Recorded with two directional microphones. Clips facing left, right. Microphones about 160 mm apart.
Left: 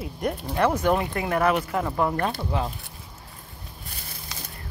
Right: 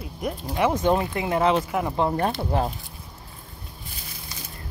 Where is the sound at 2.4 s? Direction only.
40° right (ahead or behind).